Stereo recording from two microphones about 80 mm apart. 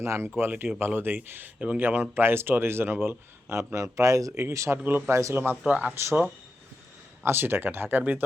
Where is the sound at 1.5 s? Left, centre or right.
Centre.